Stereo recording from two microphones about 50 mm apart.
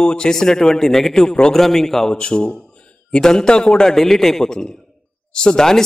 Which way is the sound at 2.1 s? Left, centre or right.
Centre.